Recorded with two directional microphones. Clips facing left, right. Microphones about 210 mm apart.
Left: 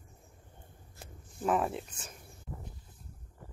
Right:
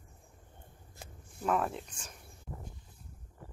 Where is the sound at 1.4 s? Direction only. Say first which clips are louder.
Left 2 dB; 5° left (ahead or behind).